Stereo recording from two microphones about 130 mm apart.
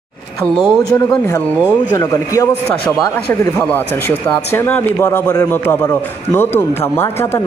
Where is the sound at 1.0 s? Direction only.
25° left (ahead or behind).